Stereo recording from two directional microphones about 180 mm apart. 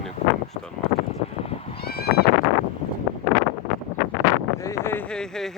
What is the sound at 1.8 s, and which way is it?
Horse, 60° left (ahead or behind).